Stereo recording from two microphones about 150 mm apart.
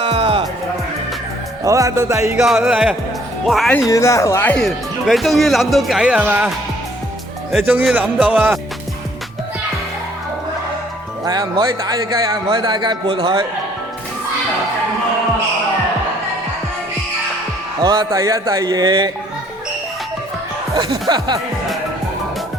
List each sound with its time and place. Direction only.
0.0 s music: 40° right (ahead or behind)
1.6 s speech: 20° right (ahead or behind)
2.6 s speech: 5° right (ahead or behind)
3.7 s speech: 20° left (ahead or behind); by 6.5 s 10° right (ahead or behind)
7.6 s speech: 10° right (ahead or behind)
11.3 s a man's voice: 30° right (ahead or behind)
17.7 s speech: 25° right (ahead or behind)
20.7 s speech: 25° right (ahead or behind)